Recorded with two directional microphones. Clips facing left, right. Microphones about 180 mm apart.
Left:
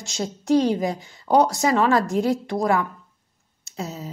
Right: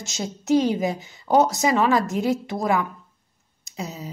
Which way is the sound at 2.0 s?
Centre (ahead or behind).